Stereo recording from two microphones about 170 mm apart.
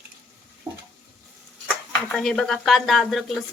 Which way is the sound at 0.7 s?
15° right (ahead or behind).